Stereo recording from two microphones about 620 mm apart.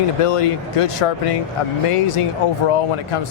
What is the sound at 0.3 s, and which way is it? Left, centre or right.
Speech, left.